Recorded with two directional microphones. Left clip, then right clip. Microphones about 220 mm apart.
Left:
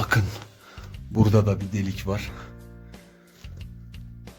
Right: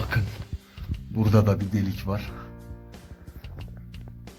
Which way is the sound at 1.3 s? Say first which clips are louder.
Right 4 dB; 5° left (ahead or behind).